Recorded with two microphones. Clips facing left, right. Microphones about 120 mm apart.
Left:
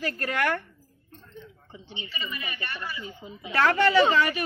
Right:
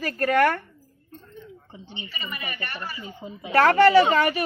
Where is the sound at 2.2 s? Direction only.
50° right (ahead or behind).